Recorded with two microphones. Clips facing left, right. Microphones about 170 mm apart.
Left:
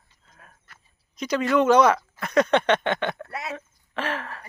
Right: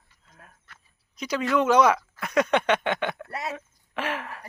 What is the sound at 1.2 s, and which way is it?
Speech, 5° right (ahead or behind).